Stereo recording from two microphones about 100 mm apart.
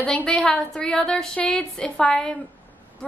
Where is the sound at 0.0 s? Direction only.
5° left (ahead or behind).